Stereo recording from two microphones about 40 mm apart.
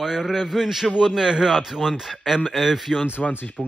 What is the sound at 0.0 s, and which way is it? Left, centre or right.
Speech, centre.